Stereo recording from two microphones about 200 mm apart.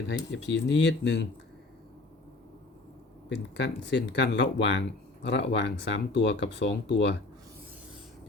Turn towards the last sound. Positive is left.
turn(degrees=60)  # may be behind; listen again after turning